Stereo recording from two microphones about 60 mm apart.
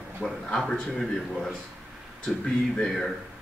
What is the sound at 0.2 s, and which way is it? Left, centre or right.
A man's voice, centre.